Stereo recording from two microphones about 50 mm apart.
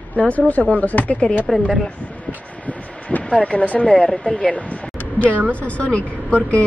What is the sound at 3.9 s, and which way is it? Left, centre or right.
A woman's voice, centre.